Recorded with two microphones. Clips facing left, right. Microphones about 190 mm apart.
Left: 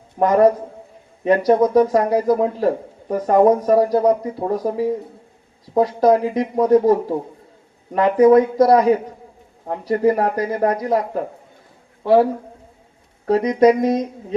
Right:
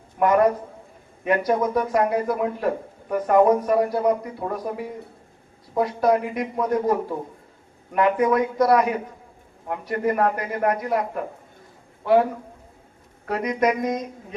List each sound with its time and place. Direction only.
0.2 s a man's voice: 35° left (ahead or behind)